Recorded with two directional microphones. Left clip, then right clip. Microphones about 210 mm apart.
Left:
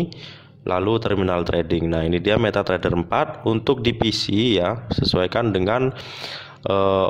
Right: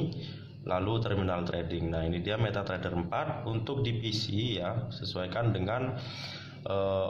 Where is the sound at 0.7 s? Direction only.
50° left (ahead or behind).